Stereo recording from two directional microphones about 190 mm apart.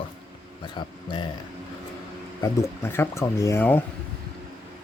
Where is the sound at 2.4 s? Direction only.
15° left (ahead or behind).